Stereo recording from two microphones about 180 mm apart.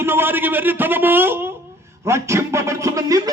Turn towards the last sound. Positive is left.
turn(degrees=-15)  # may be behind; listen again after turning